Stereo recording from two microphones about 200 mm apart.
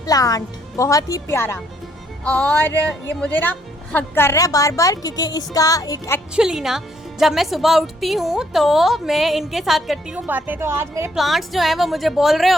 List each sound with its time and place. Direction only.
0.0 s a woman's voice: 15° left (ahead or behind)
6.3 s a woman's voice: 5° right (ahead or behind)
11.2 s a woman's voice: centre (ahead or behind)